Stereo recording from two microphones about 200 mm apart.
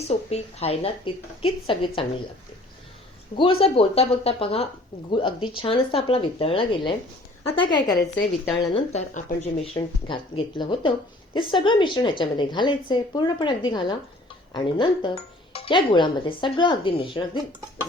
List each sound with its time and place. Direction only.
0.0 s speech: 30° left (ahead or behind)
3.3 s speech: 25° left (ahead or behind)
8.9 s speech: 35° left (ahead or behind)